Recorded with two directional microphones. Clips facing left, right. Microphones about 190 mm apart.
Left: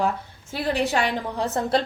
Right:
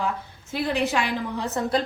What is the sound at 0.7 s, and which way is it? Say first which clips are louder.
A woman's voice: left 2 dB; 35° left (ahead or behind).